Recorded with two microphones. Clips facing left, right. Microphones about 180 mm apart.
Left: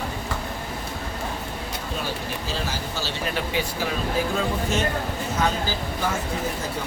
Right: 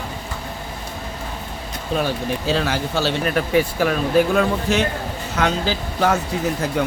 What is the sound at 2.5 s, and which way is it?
Speech, 70° right (ahead or behind).